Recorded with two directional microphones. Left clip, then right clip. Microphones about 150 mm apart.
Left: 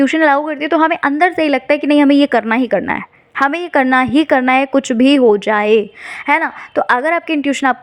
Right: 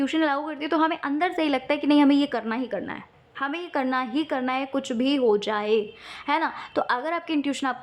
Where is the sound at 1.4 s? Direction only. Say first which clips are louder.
Left 11 dB; 30° left (ahead or behind).